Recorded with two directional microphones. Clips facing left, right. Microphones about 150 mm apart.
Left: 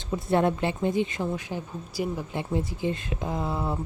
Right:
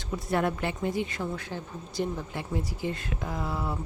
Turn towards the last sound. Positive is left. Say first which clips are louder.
# left 3 dB
turn(degrees=25)  # may be behind; listen again after turning